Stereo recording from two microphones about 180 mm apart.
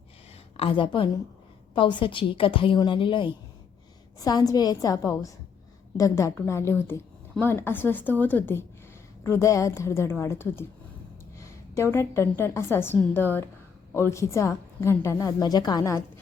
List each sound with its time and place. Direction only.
0.5 s a woman's voice: 30° left (ahead or behind)